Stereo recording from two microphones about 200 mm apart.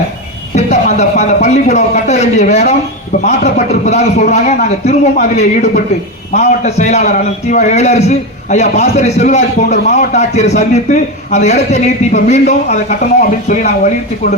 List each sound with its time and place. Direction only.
0.5 s a man's voice: 35° left (ahead or behind)